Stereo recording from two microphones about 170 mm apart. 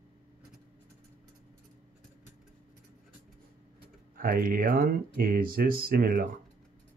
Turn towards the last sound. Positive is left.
turn(degrees=-60)  # may be behind; listen again after turning